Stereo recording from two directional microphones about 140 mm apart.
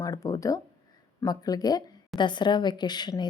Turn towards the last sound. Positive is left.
turn(degrees=30)  # may be behind; listen again after turning